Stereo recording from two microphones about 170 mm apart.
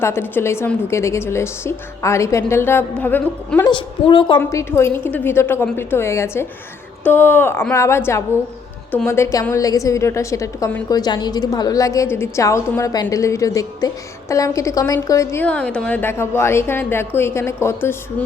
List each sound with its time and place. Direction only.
0.0 s a woman's voice: 15° left (ahead or behind)
3.7 s a woman's voice: 30° left (ahead or behind)
4.4 s a woman's voice: 15° left (ahead or behind)